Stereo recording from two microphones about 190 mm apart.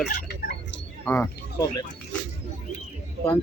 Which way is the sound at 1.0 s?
10° left (ahead or behind).